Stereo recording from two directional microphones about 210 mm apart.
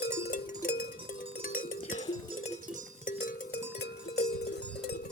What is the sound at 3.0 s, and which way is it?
Music, 45° left (ahead or behind).